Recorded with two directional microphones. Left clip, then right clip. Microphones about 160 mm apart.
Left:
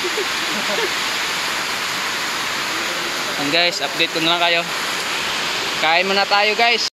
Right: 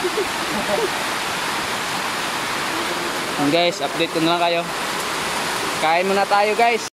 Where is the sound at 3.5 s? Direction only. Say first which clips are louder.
Left 3 dB; 20° right (ahead or behind).